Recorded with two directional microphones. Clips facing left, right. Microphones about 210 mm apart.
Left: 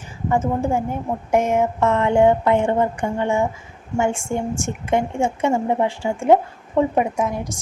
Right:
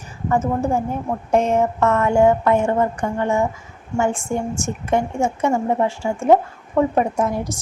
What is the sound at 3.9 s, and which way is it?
Speech, 25° left (ahead or behind).